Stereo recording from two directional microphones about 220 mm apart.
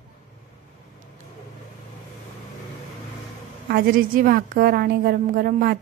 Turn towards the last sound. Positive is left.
turn(degrees=-40)  # may be behind; listen again after turning